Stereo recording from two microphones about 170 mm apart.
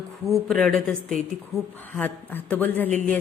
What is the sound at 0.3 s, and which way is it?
A woman's voice, 5° left (ahead or behind).